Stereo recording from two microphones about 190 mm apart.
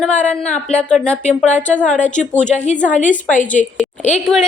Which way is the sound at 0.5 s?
5° left (ahead or behind).